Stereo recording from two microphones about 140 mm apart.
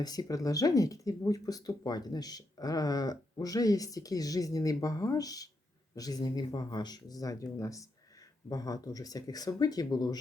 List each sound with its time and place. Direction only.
0.0 s speech: 30° left (ahead or behind)